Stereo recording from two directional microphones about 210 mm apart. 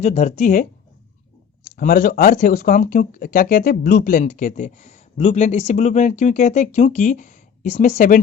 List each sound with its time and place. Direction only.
0.0 s speech: 35° left (ahead or behind)